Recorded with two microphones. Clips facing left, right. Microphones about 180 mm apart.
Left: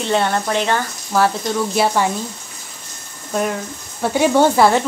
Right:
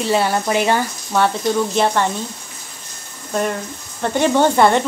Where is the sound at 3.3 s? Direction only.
5° left (ahead or behind).